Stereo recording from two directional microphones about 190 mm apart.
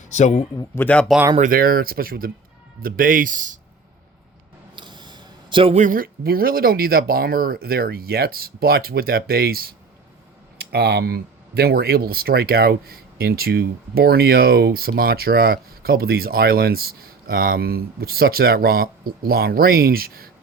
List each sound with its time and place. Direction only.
0.1 s a man's voice: 35° left (ahead or behind)
0.5 s a man's voice: 20° left (ahead or behind)
0.9 s speech: 5° left (ahead or behind)
1.4 s speech: 50° right (ahead or behind)
4.7 s a sound: 25° right (ahead or behind)
5.7 s speech: 45° right (ahead or behind)